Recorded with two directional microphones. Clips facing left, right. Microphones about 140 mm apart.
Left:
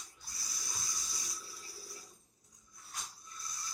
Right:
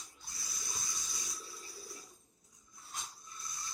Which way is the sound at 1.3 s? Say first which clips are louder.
Right 2 dB; 25° right (ahead or behind).